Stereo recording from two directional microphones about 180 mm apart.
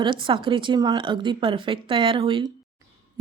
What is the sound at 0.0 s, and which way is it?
Speech, 25° right (ahead or behind).